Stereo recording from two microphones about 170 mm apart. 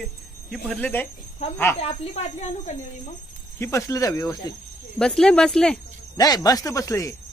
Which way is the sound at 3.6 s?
15° left (ahead or behind).